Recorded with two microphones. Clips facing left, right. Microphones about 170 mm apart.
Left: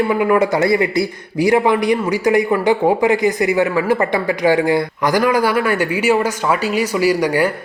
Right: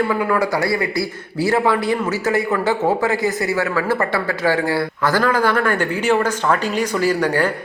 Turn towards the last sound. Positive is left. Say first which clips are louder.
# left 3 dB
turn(degrees=10)  # may be behind; listen again after turning